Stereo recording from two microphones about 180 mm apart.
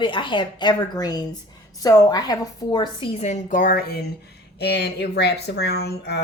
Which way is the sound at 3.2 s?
45° left (ahead or behind).